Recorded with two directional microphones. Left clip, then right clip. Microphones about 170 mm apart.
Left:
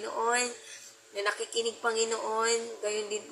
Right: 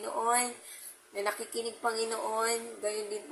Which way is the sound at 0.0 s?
15° right (ahead or behind).